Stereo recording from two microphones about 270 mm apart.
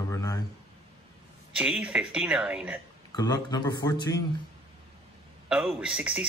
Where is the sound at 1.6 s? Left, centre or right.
Centre.